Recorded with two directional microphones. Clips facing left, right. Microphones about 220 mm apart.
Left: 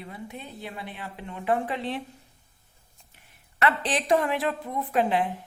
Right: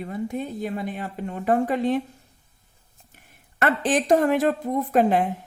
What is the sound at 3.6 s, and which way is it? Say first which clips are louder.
A woman's voice: right 4 dB; 50° right (ahead or behind).